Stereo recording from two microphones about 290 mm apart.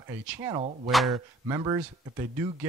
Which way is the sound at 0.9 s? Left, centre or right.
Centre.